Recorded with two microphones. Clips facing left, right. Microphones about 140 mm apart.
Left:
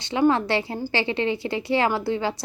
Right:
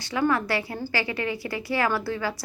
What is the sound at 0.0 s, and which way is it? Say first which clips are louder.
Speech: left 4 dB; 20° left (ahead or behind).